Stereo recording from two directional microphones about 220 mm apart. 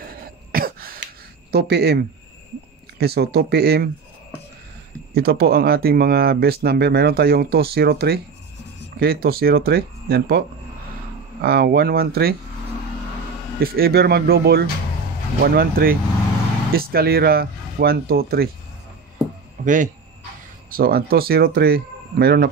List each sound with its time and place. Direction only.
0.1 s throat clearing: 40° right (ahead or behind)
1.5 s speech: 45° right (ahead or behind)
5.1 s speech: 45° right (ahead or behind)
11.4 s speech: 45° right (ahead or behind)
13.6 s speech: 45° right (ahead or behind)
19.6 s speech: 35° right (ahead or behind)